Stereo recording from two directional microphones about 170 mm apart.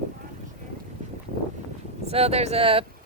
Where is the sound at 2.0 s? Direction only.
35° right (ahead or behind).